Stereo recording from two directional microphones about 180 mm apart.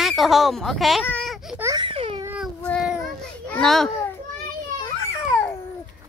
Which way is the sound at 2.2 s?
10° right (ahead or behind).